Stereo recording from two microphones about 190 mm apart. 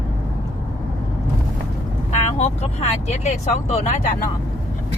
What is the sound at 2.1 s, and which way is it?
Speech, 35° left (ahead or behind).